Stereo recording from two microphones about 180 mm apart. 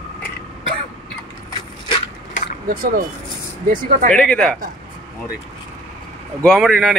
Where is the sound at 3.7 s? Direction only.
45° right (ahead or behind).